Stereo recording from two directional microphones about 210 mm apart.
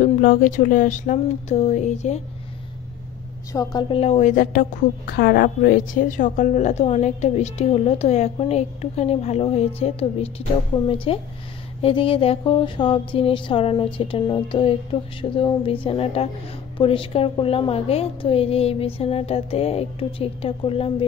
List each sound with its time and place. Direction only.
0.0 s a woman's voice: 40° left (ahead or behind)
3.5 s a woman's voice: 20° left (ahead or behind)
11.1 s mantra: 25° left (ahead or behind)